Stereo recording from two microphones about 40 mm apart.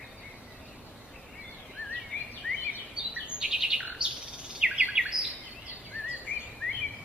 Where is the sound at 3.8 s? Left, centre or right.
Right.